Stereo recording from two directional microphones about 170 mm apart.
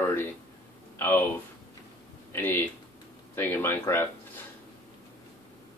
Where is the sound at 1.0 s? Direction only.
10° left (ahead or behind).